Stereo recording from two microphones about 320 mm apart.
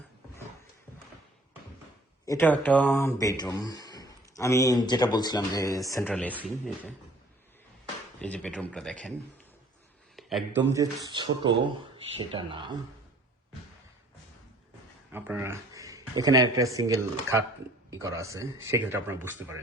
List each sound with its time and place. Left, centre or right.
2.2 s speech: centre
8.2 s speech: centre
10.2 s speech: centre
10.7 s speech: centre
15.1 s speech: centre